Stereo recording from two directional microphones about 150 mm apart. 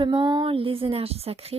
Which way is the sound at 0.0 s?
35° right (ahead or behind).